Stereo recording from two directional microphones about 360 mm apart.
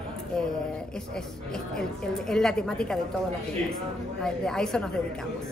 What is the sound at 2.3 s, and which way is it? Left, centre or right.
Speech, centre.